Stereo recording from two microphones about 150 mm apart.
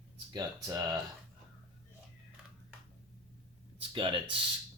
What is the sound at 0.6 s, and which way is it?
Speech, 25° right (ahead or behind).